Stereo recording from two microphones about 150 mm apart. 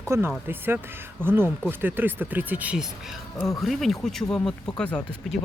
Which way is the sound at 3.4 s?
Centre (ahead or behind).